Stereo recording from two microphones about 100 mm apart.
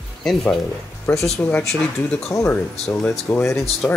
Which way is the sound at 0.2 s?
5° left (ahead or behind).